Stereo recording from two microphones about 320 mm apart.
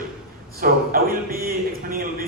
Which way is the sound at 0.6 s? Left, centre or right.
Right.